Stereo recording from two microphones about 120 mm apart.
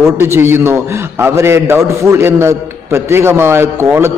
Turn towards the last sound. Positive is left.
turn(degrees=-20)  # may be behind; listen again after turning